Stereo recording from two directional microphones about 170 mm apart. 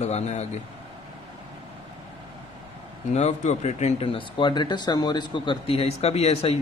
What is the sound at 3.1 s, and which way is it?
Speech, 40° left (ahead or behind).